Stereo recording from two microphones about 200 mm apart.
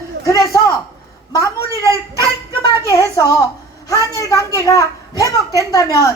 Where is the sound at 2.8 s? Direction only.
15° left (ahead or behind).